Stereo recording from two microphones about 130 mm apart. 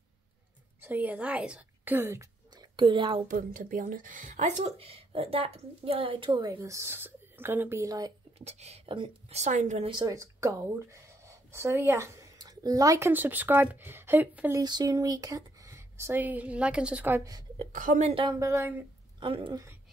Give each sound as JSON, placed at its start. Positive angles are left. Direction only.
{"t": 0.7, "sound": "a woman's voice", "side_deg": -15}
{"t": 2.5, "sound": "a woman's voice", "side_deg": -35}
{"t": 3.3, "sound": "speech", "side_deg": -90}
{"t": 6.4, "sound": "speech", "side_deg": -25}
{"t": 8.4, "sound": "speech", "side_deg": -55}
{"t": 8.8, "sound": "a woman's voice", "side_deg": -40}
{"t": 9.3, "sound": "speech", "side_deg": -65}
{"t": 9.8, "sound": "a woman's voice", "side_deg": -35}
{"t": 10.1, "sound": "speech", "side_deg": -25}
{"t": 14.5, "sound": "speech", "side_deg": -35}
{"t": 17.2, "sound": "speech", "side_deg": -30}
{"t": 17.7, "sound": "a woman's voice", "side_deg": -75}
{"t": 18.4, "sound": "speech", "side_deg": -20}
{"t": 19.1, "sound": "a woman's voice", "side_deg": -40}